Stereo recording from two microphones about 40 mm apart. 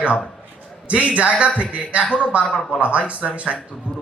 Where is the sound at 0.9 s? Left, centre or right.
Right.